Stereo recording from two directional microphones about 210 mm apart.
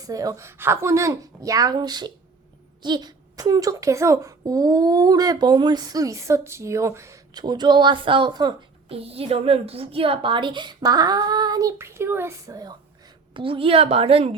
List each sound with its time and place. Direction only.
0.0 s a woman's voice: 15° right (ahead or behind)